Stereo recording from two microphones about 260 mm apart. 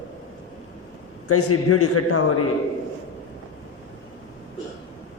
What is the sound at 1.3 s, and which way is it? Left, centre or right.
Speech, left.